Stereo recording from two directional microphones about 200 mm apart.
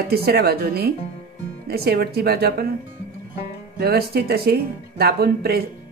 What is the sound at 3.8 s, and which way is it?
Speech, 50° right (ahead or behind).